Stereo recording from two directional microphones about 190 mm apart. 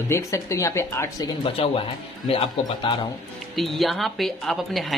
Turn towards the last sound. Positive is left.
turn(degrees=0)  # may be behind; listen again after turning